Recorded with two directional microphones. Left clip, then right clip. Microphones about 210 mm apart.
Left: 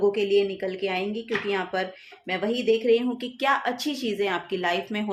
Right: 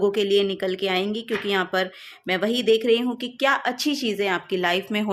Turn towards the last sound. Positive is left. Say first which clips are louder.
# right 3 dB
turn(degrees=-35)  # may be behind; listen again after turning